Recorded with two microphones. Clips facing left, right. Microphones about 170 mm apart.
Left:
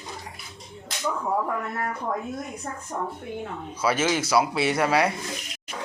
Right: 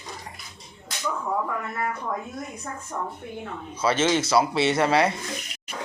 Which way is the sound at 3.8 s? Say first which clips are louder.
Right 2 dB; 10° left (ahead or behind).